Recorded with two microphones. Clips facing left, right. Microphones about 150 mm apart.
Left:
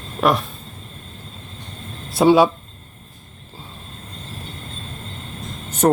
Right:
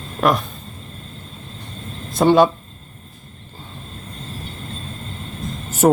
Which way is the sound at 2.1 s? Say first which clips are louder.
Even; 5° left (ahead or behind).